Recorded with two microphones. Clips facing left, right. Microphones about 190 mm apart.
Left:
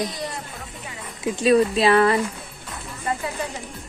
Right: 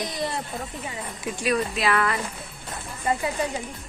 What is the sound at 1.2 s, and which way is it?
Speech, 25° left (ahead or behind).